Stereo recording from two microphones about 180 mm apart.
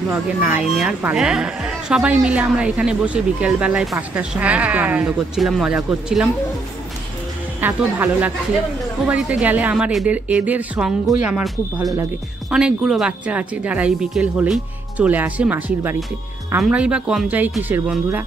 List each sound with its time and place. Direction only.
0.1 s speech: 10° right (ahead or behind)
7.6 s speech: 10° right (ahead or behind)
11.8 s speech: 20° right (ahead or behind)
12.4 s speech: 5° right (ahead or behind)